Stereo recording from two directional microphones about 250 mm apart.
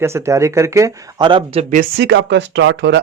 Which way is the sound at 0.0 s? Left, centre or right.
Centre.